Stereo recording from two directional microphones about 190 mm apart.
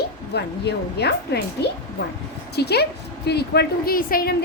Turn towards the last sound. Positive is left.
turn(degrees=50)  # may be behind; listen again after turning